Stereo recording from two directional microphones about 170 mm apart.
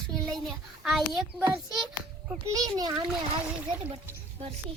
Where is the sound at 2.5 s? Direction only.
20° right (ahead or behind).